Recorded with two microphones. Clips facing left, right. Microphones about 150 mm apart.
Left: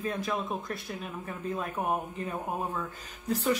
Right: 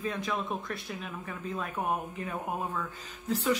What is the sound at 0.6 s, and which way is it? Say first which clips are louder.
Speech: left 1 dB; 35° left (ahead or behind).